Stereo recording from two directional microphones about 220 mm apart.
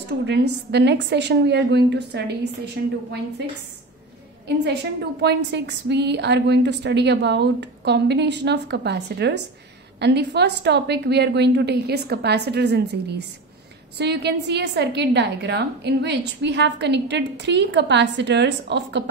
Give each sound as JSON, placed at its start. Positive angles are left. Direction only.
{"t": 0.2, "sound": "a woman's voice", "side_deg": -50}
{"t": 5.2, "sound": "a woman's voice", "side_deg": -50}